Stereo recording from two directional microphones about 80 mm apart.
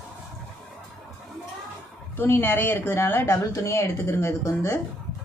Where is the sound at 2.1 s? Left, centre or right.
Left.